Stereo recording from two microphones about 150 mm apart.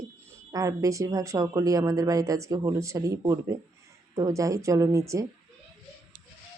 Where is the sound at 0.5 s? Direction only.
20° right (ahead or behind).